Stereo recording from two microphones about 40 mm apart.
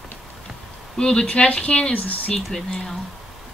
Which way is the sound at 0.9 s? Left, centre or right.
Left.